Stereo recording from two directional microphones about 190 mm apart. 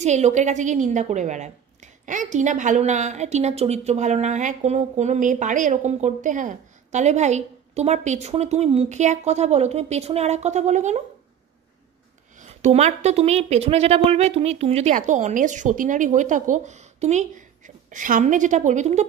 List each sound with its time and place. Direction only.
0.0 s a woman's voice: 35° right (ahead or behind)
12.4 s a woman's voice: 40° right (ahead or behind)